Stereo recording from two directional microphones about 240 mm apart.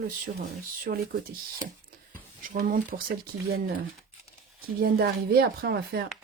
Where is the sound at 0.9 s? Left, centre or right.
Right.